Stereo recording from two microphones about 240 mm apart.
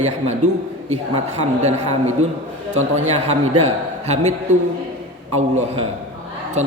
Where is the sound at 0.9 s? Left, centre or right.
Right.